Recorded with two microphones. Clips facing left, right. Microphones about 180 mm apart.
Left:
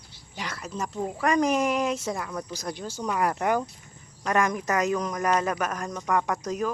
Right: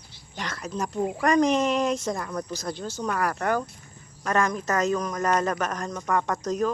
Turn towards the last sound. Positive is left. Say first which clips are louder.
# right 2 dB
turn(degrees=10)  # may be behind; listen again after turning